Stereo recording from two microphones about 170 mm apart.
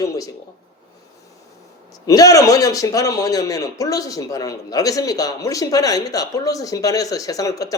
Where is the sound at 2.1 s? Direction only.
20° left (ahead or behind).